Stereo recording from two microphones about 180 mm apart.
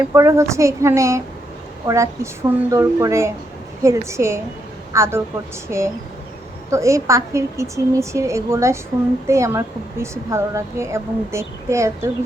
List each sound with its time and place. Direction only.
0.1 s speech: 15° right (ahead or behind)